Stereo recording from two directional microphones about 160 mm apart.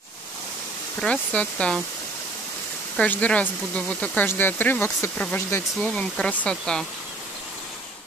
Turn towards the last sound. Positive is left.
turn(degrees=5)  # may be behind; listen again after turning